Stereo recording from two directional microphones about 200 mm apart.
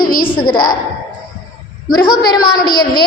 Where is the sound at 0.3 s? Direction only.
25° left (ahead or behind).